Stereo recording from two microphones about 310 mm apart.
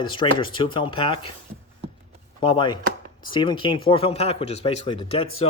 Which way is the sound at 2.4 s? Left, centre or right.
Centre.